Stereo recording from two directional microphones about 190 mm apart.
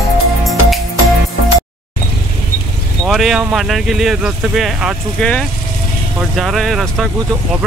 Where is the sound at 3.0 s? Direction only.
Centre (ahead or behind).